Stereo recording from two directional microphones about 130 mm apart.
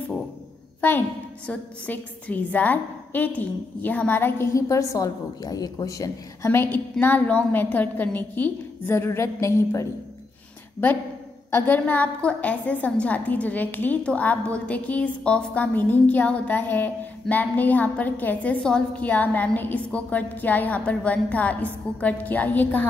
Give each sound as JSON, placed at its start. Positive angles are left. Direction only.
{"t": 0.7, "sound": "a woman's voice", "side_deg": 15}
{"t": 11.5, "sound": "a woman's voice", "side_deg": 15}